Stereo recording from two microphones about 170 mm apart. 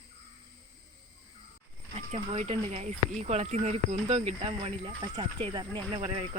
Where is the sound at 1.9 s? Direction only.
40° right (ahead or behind).